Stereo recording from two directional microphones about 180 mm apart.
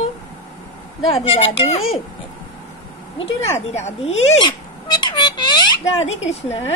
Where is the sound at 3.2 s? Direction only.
40° left (ahead or behind).